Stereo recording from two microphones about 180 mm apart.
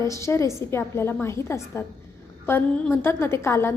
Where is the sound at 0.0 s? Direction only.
15° left (ahead or behind).